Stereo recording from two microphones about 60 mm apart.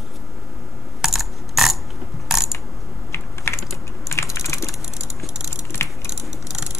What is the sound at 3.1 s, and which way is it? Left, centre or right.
Typing, left.